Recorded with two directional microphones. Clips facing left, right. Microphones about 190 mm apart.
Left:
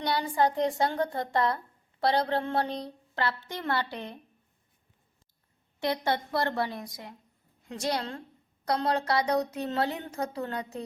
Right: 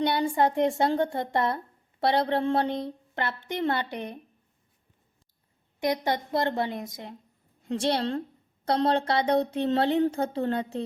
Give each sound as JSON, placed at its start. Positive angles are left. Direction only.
{"t": 0.0, "sound": "speech", "side_deg": -25}
{"t": 5.8, "sound": "a woman's voice", "side_deg": -15}